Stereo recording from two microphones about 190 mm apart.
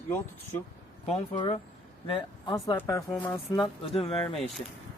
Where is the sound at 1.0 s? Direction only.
35° left (ahead or behind).